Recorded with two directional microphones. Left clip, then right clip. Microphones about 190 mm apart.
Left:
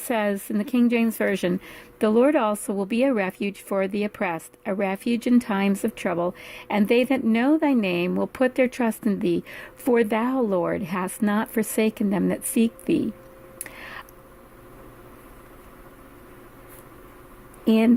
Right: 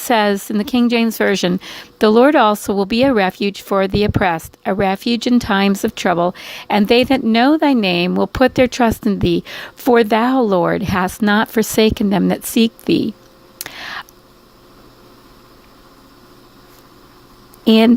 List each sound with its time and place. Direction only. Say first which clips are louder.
0.0 s a woman's voice: right 10 dB; 40° right (ahead or behind)
13.6 s a sound: right 11 dB; 40° right (ahead or behind)
17.7 s a woman's voice: right 8 dB; 40° right (ahead or behind)